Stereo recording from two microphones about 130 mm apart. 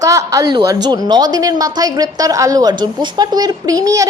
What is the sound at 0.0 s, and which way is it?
A woman's voice, 25° right (ahead or behind).